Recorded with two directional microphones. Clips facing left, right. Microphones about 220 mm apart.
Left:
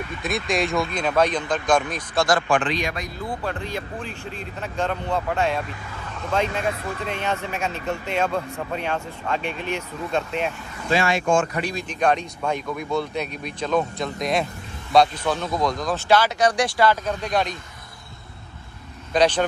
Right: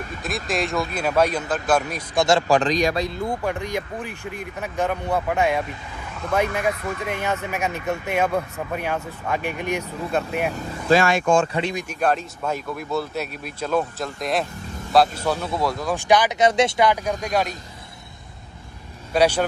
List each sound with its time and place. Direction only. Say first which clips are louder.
0.2 s speech: left 2 dB; centre (ahead or behind)
2.2 s a man's voice: right 4 dB; 30° right (ahead or behind)
3.4 s speech: right 3 dB; 15° right (ahead or behind)
10.5 s a man's voice: right 5 dB; 40° right (ahead or behind)
11.5 s speech: right 2 dB; 25° right (ahead or behind)
11.9 s speech: left 4 dB; 5° right (ahead or behind)
19.1 s speech: right 1 dB; 10° right (ahead or behind)